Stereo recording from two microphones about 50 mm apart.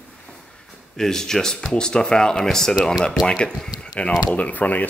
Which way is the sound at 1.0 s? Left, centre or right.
Centre.